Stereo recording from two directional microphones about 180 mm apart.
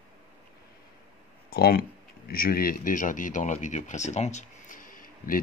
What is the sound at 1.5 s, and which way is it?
Speech, 55° left (ahead or behind).